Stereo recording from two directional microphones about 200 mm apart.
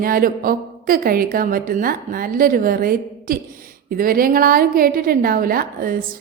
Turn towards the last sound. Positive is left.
turn(degrees=-45)  # may be behind; listen again after turning